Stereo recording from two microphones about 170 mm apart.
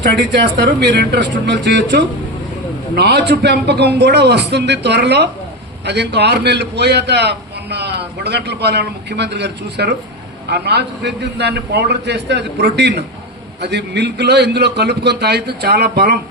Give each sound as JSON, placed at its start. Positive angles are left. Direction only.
{"t": 0.0, "sound": "speech", "side_deg": -90}
{"t": 2.9, "sound": "a man's voice", "side_deg": -75}